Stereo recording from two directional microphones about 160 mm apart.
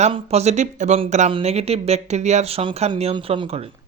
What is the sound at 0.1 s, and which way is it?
Speech, 40° right (ahead or behind).